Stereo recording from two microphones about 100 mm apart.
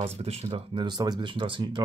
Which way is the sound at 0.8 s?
45° right (ahead or behind).